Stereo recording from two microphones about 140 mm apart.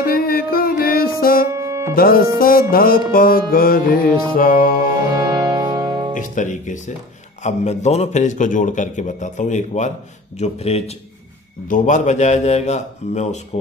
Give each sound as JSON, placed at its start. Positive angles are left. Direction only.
{"t": 0.0, "sound": "music", "side_deg": 90}
{"t": 1.5, "sound": "music", "side_deg": -20}
{"t": 2.0, "sound": "music", "side_deg": 90}
{"t": 5.1, "sound": "music", "side_deg": -25}
{"t": 6.1, "sound": "a man's voice", "side_deg": 65}
{"t": 11.7, "sound": "a man's voice", "side_deg": 65}